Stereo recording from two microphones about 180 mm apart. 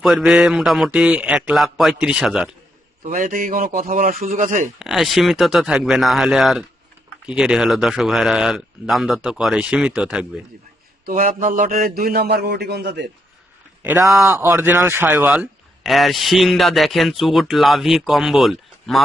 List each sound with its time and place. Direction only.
0.0 s a man's voice: centre (ahead or behind)
3.0 s a man's voice: 50° right (ahead or behind)
4.8 s a man's voice: centre (ahead or behind)
11.2 s a man's voice: 45° right (ahead or behind); by 13.1 s 65° right (ahead or behind)
13.8 s a man's voice: 15° right (ahead or behind)